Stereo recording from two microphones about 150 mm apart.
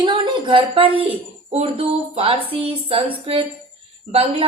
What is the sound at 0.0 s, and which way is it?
A woman's voice, 30° right (ahead or behind).